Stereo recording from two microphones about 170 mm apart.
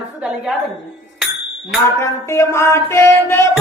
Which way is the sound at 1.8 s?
15° left (ahead or behind).